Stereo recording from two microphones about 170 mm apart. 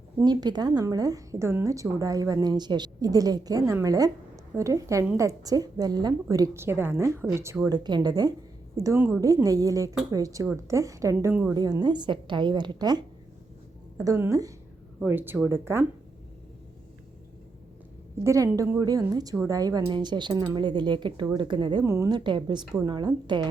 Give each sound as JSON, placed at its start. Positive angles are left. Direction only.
{"t": 0.2, "sound": "a woman's voice", "side_deg": -25}
{"t": 18.2, "sound": "a woman's voice", "side_deg": -15}